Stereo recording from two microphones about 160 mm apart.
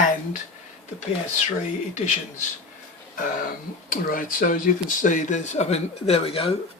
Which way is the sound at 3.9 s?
60° left (ahead or behind).